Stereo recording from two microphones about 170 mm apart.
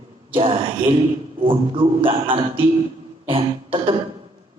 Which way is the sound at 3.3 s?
30° right (ahead or behind).